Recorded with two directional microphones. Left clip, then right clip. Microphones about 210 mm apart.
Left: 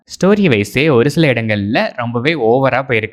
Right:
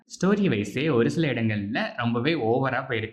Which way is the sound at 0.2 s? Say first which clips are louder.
Left 12 dB; 40° left (ahead or behind).